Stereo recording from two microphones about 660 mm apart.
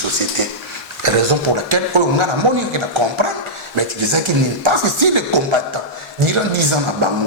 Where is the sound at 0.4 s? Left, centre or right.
Right.